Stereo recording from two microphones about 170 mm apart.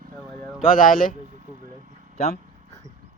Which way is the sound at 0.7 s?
55° left (ahead or behind).